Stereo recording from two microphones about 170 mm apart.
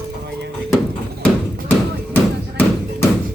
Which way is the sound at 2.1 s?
10° left (ahead or behind).